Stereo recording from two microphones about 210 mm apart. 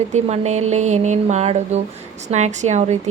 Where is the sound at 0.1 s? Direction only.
35° right (ahead or behind).